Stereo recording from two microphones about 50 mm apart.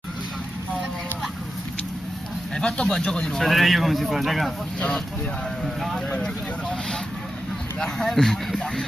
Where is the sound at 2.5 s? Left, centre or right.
Centre.